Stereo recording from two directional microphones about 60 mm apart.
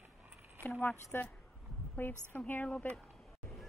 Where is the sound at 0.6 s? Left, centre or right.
Left.